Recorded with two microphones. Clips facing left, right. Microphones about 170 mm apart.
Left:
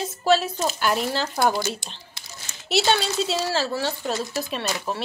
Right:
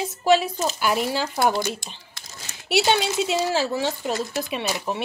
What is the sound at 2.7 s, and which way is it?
Speech, 10° right (ahead or behind).